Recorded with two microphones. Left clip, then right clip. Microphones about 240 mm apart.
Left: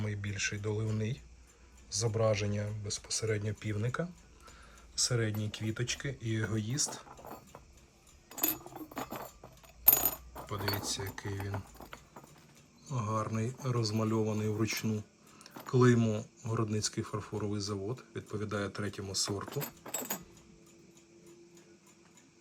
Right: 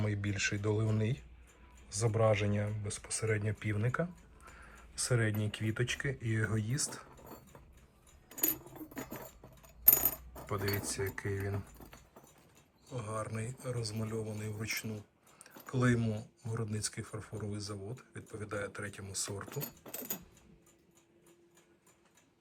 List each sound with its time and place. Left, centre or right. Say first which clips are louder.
0.0 s speech: right 1 dB; centre
9.0 s chink: left 5 dB; centre
9.9 s coin: left 2 dB; centre
10.8 s speech: even; centre
12.9 s speech: left 4 dB; centre